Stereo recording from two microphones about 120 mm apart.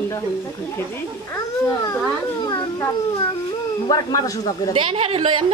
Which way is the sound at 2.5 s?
25° left (ahead or behind).